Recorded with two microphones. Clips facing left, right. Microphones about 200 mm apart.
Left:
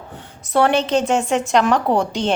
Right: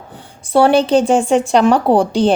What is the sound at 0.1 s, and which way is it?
A woman's voice, 30° right (ahead or behind).